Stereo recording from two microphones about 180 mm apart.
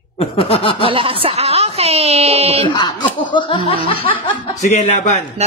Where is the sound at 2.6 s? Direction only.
25° left (ahead or behind).